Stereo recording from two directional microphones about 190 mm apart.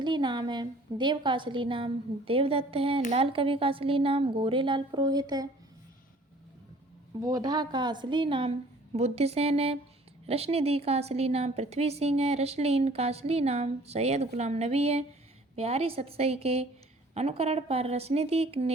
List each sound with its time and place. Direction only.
0.0 s a woman's voice: 25° right (ahead or behind)
7.2 s a woman's voice: 20° right (ahead or behind)